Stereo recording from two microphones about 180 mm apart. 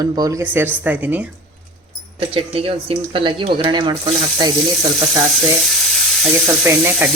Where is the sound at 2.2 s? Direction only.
30° right (ahead or behind).